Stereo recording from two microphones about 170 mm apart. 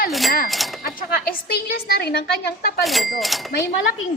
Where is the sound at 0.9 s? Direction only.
60° left (ahead or behind).